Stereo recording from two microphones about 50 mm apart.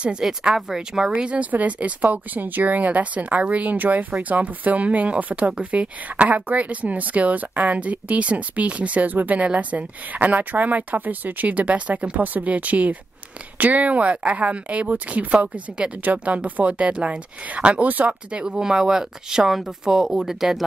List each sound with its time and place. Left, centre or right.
0.2 s speech: centre
1.1 s a woman's voice: right
18.4 s speech: centre